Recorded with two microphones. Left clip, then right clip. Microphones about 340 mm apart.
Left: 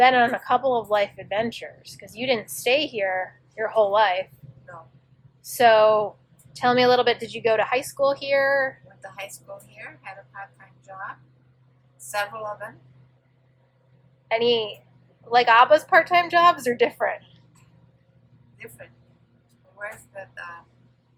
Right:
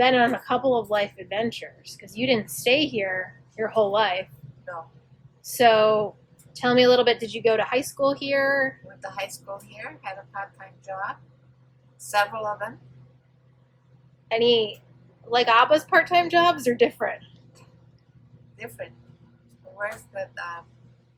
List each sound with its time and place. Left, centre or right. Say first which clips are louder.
0.0 s a woman's voice: left 2 dB; centre
5.5 s speech: left 2 dB; centre
9.0 s a woman's voice: right 4 dB; centre
14.3 s a woman's voice: right 1 dB; centre
18.5 s a woman's voice: right 6 dB; centre